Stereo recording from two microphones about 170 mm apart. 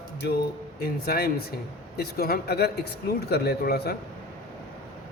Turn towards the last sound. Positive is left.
turn(degrees=70)  # may be behind; listen again after turning